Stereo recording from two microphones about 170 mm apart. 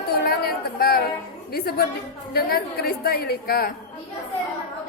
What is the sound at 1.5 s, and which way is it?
A woman's voice, 65° left (ahead or behind).